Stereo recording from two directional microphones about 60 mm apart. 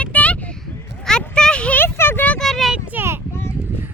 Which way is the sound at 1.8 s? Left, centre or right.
Left.